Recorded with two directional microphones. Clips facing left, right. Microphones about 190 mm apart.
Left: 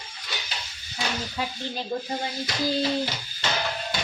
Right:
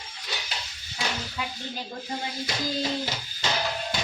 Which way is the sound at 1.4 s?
35° left (ahead or behind).